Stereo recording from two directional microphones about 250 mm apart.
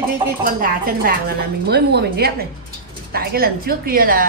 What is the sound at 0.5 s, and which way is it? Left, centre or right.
A woman's voice, right.